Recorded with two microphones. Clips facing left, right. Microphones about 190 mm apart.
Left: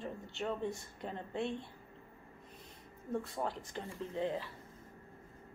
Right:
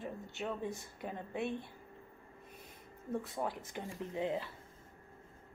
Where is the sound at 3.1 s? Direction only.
10° right (ahead or behind).